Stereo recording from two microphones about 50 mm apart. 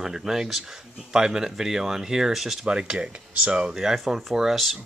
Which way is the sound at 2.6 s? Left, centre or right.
Centre.